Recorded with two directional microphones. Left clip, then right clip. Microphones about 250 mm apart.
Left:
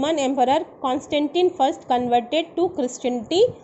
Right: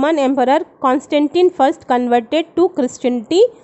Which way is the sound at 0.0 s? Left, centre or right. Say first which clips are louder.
Right 6 dB; right.